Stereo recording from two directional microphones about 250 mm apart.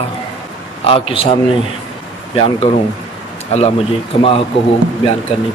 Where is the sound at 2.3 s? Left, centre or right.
Centre.